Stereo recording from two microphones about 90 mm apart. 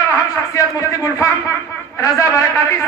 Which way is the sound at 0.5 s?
35° left (ahead or behind).